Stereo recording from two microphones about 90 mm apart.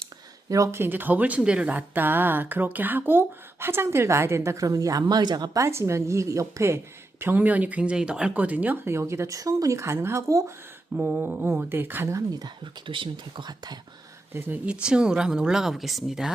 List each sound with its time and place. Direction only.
0.5 s a woman's voice: 35° right (ahead or behind)
0.8 s speech: 20° right (ahead or behind); by 5.5 s 50° right (ahead or behind)
5.5 s a woman's voice: 35° right (ahead or behind)
7.2 s speech: 20° right (ahead or behind)
10.9 s speech: 15° right (ahead or behind)
12.1 s speech: 45° right (ahead or behind)
12.9 s speech: 65° right (ahead or behind)
14.3 s speech: 15° right (ahead or behind)